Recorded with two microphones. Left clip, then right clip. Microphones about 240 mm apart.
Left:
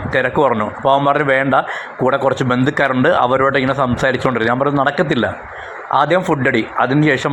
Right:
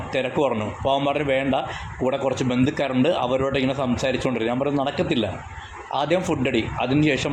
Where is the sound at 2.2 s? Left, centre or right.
Centre.